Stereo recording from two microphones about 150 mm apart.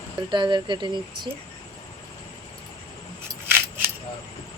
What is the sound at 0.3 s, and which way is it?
Speech, 30° right (ahead or behind).